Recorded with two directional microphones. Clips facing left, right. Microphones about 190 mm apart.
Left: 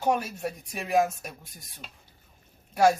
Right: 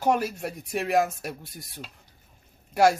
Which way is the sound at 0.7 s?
75° right (ahead or behind).